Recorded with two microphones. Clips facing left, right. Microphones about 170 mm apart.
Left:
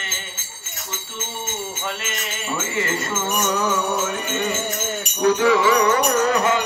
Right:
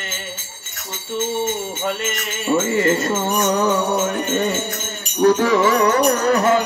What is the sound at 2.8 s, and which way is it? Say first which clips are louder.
Music: right 7 dB; 35° right (ahead or behind).